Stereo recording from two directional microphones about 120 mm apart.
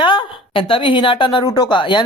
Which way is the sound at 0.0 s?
40° left (ahead or behind).